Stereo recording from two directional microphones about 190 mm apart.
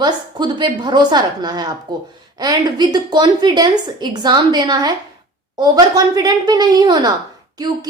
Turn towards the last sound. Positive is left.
turn(degrees=-20)  # may be behind; listen again after turning